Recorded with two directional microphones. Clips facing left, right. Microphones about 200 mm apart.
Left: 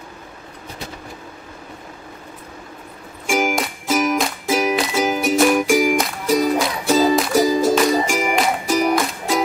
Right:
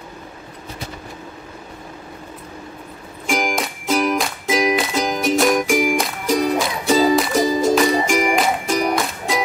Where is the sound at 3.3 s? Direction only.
5° left (ahead or behind).